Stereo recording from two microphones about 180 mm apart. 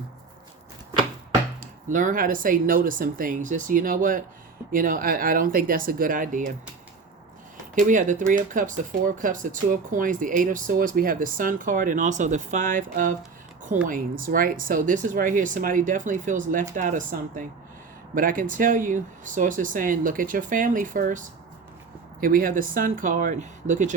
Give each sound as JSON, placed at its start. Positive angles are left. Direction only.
{"t": 1.9, "sound": "speech", "side_deg": -45}
{"t": 7.8, "sound": "speech", "side_deg": -45}